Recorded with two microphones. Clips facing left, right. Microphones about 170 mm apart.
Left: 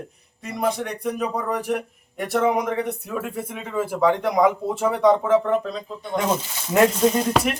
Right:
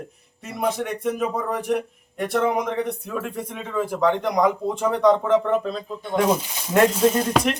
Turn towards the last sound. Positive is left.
turn(degrees=0)  # may be behind; listen again after turning